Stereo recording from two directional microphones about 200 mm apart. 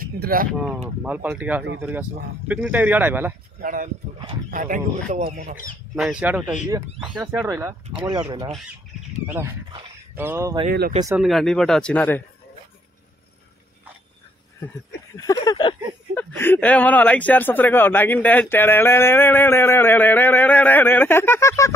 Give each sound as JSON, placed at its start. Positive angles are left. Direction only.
{"t": 0.0, "sound": "speech", "side_deg": -45}
{"t": 0.5, "sound": "speech", "side_deg": -5}
{"t": 3.6, "sound": "speech", "side_deg": -40}
{"t": 5.9, "sound": "speech", "side_deg": -5}
{"t": 11.1, "sound": "speech", "side_deg": 0}
{"t": 15.1, "sound": "a sound", "side_deg": 20}
{"t": 16.2, "sound": "speech", "side_deg": 10}